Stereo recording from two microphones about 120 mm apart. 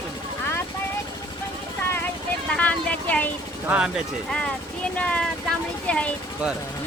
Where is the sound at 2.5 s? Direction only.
10° left (ahead or behind).